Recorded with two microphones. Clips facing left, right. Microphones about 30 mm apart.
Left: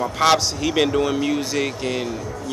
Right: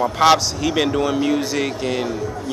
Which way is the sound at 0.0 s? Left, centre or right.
Centre.